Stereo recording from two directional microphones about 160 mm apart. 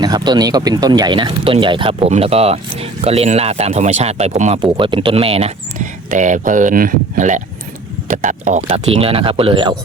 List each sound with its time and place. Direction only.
0.0 s speech: 25° right (ahead or behind); by 4.6 s 45° right (ahead or behind)
4.6 s speech: 30° right (ahead or behind)
6.1 s speech: 50° right (ahead or behind); by 9.7 s 30° right (ahead or behind)